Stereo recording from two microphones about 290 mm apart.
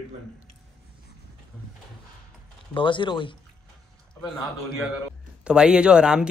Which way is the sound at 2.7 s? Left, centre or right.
Centre.